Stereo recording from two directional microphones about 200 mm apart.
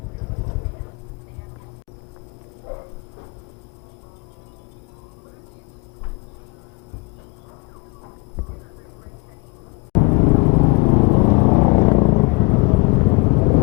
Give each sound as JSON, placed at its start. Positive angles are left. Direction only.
{"t": 10.0, "sound": "vehicle", "side_deg": 30}